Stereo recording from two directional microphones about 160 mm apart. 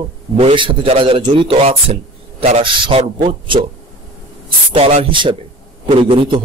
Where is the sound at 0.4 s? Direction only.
35° right (ahead or behind).